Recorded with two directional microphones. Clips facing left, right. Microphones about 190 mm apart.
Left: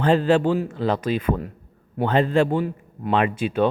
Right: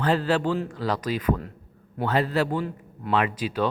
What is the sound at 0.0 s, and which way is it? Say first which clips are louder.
A man's voice: left 5 dB; 25° left (ahead or behind).